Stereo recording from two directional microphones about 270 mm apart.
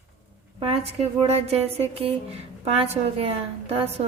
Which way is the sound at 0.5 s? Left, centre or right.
Right.